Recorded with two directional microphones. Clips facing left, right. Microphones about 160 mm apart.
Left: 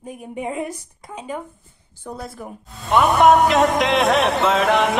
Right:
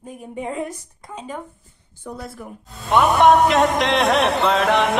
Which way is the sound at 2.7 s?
Centre (ahead or behind).